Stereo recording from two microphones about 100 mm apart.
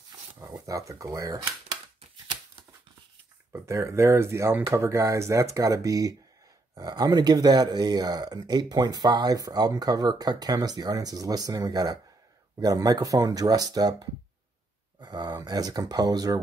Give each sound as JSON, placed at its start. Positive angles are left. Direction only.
{"t": 0.5, "sound": "speech", "side_deg": -35}
{"t": 3.5, "sound": "speech", "side_deg": -30}